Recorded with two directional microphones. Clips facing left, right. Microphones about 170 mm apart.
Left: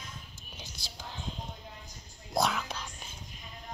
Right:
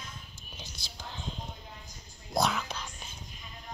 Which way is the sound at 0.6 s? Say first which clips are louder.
Even; 10° left (ahead or behind).